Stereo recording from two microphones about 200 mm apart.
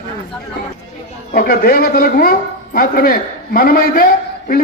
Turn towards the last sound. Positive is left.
turn(degrees=50)  # may be behind; listen again after turning